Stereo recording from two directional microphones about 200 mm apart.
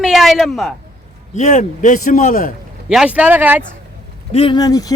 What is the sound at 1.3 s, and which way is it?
A man's voice, 35° left (ahead or behind).